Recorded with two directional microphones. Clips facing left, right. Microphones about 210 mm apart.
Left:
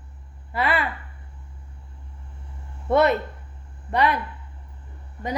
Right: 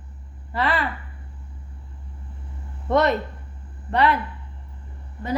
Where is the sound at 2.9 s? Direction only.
10° left (ahead or behind).